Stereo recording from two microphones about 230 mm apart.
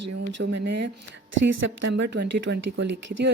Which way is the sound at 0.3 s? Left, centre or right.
Right.